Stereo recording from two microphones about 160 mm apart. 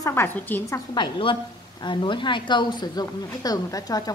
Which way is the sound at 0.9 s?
30° left (ahead or behind).